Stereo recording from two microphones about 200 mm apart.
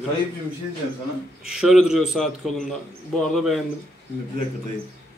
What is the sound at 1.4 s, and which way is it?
Speech, 5° right (ahead or behind).